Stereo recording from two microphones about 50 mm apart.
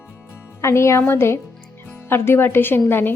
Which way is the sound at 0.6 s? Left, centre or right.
Left.